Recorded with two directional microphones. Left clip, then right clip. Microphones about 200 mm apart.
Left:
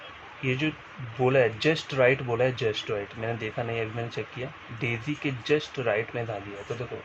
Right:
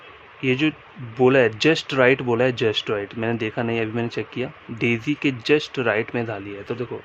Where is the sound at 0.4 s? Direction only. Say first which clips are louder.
Right 7 dB; 55° right (ahead or behind).